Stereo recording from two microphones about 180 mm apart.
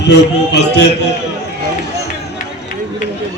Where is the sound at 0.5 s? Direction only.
70° left (ahead or behind).